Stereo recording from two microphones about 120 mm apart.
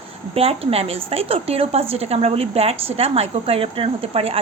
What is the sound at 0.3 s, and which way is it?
A woman's voice, 55° right (ahead or behind).